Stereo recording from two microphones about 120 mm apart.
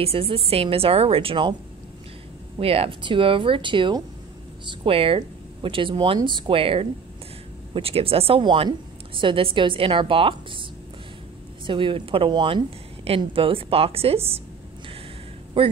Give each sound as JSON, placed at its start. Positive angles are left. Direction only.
{"t": 0.0, "sound": "a woman's voice", "side_deg": -50}
{"t": 2.6, "sound": "a woman's voice", "side_deg": -55}
{"t": 11.6, "sound": "a woman's voice", "side_deg": -45}
{"t": 13.0, "sound": "a woman's voice", "side_deg": -50}
{"t": 15.6, "sound": "a woman's voice", "side_deg": -45}